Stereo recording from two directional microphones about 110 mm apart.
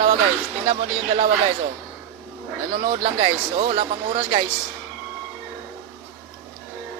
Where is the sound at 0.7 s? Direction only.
85° right.